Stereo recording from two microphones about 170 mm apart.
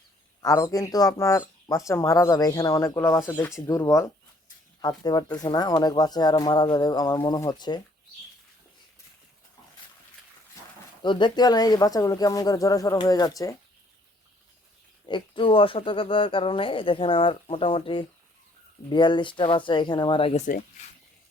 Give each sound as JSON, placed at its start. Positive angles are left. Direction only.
{"t": 0.4, "sound": "speech", "side_deg": 20}
{"t": 11.0, "sound": "speech", "side_deg": 25}
{"t": 15.0, "sound": "speech", "side_deg": 30}